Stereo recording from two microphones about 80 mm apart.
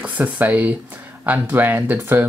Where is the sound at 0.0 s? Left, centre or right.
Centre.